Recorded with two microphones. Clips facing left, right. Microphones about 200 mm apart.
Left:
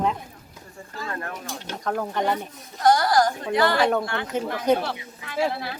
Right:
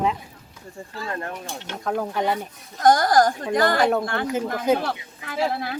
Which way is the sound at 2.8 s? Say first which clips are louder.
Right 2 dB; 45° right (ahead or behind).